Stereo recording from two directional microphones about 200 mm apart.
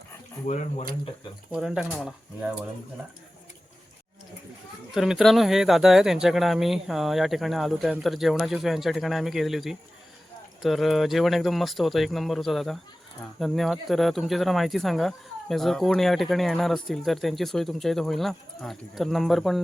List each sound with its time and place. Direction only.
0.4 s speech: 35° left (ahead or behind)
1.5 s speech: 5° right (ahead or behind)
4.9 s speech: centre (ahead or behind)